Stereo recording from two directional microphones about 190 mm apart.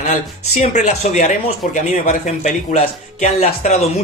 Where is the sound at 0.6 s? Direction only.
40° left (ahead or behind).